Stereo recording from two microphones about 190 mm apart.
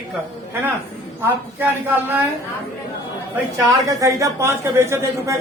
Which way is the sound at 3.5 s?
15° right (ahead or behind).